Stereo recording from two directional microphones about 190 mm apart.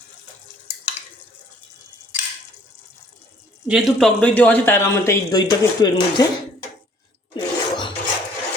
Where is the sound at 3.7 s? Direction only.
5° right (ahead or behind).